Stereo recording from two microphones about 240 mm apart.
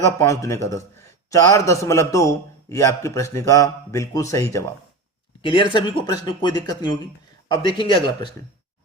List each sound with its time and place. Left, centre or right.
0.0 s a man's voice: centre